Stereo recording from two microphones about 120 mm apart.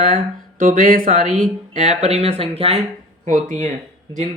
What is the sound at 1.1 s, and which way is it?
Speech, 90° right.